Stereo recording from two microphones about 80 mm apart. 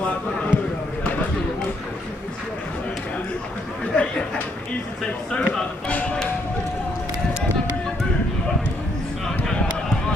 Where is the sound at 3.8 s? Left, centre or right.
Centre.